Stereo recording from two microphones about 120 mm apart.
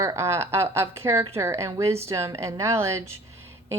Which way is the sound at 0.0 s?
20° right (ahead or behind).